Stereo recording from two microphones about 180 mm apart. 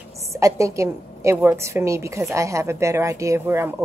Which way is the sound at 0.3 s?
15° right (ahead or behind).